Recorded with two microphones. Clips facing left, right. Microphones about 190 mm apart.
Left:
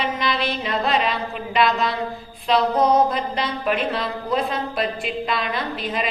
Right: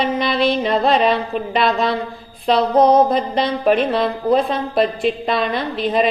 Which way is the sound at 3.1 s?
35° right (ahead or behind).